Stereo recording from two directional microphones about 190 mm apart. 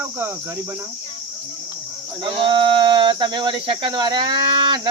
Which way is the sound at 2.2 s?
25° right (ahead or behind).